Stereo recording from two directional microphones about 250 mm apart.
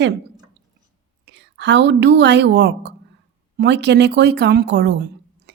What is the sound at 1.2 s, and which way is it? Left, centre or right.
A woman's voice, right.